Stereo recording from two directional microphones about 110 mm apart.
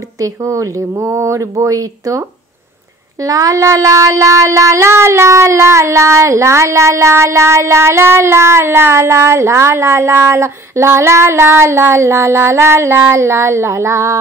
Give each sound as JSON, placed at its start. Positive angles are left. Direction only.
{"t": 0.2, "sound": "child singing", "side_deg": -30}